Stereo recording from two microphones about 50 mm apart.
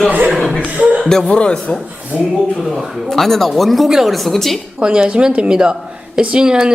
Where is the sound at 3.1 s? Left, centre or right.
Centre.